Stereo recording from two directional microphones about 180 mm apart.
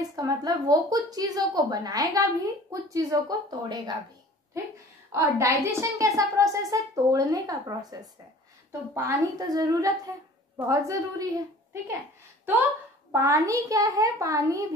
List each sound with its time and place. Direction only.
0.0 s a woman's voice: 20° right (ahead or behind)
5.1 s a woman's voice: 15° right (ahead or behind)
13.1 s a woman's voice: 15° right (ahead or behind)